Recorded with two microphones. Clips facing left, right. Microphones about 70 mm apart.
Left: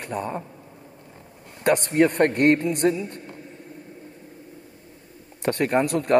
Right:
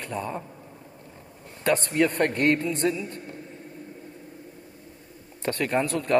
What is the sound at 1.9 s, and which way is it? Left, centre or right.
Speech, left.